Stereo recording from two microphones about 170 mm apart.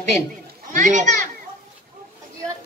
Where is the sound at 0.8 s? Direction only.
45° right (ahead or behind).